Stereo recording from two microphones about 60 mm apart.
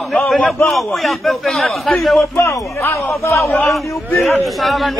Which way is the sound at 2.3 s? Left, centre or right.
Left.